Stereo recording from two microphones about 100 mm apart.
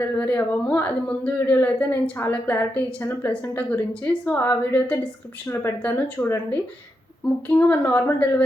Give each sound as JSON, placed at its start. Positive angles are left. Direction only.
{"t": 0.0, "sound": "a woman's voice", "side_deg": 15}